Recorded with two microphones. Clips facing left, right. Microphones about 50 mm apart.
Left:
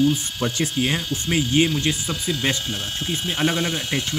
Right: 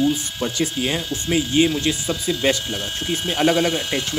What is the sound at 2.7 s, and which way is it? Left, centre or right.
Speech, right.